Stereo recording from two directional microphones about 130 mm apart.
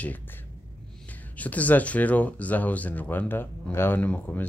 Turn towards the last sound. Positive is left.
turn(degrees=15)  # may be behind; listen again after turning